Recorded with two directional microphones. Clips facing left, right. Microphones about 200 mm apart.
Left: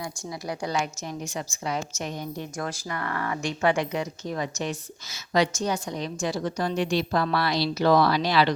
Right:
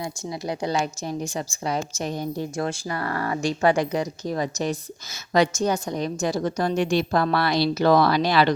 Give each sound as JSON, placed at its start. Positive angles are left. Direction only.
{"t": 0.0, "sound": "a woman's voice", "side_deg": -25}
{"t": 5.3, "sound": "a woman's voice", "side_deg": -50}